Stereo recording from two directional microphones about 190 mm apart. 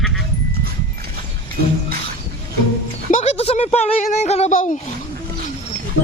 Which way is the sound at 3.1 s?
35° left (ahead or behind).